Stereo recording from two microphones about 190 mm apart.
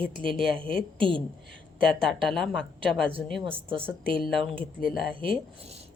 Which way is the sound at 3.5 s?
30° right (ahead or behind).